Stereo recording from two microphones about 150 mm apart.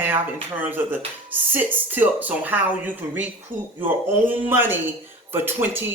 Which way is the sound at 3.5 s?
60° right (ahead or behind).